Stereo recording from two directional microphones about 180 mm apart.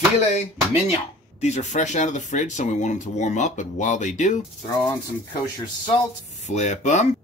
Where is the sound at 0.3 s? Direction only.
40° left (ahead or behind).